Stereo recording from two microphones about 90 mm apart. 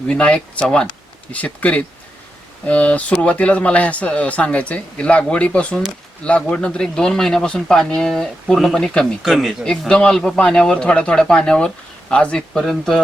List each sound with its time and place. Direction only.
0.1 s speech: 10° left (ahead or behind)
9.2 s speech: centre (ahead or behind)
9.6 s speech: 10° left (ahead or behind)